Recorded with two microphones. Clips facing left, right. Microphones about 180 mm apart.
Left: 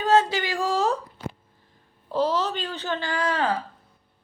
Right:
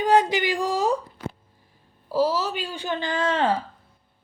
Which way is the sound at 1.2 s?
30° left (ahead or behind).